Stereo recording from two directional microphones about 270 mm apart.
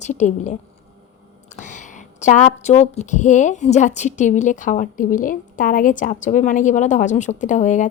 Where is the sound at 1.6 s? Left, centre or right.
Left.